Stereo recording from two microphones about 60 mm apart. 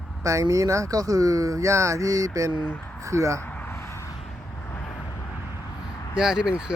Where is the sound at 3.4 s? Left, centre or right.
Left.